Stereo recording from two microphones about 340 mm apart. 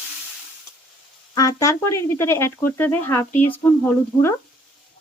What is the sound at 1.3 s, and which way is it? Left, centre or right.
Speech, centre.